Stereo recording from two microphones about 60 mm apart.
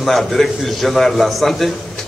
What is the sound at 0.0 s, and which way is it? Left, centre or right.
A man's voice, centre.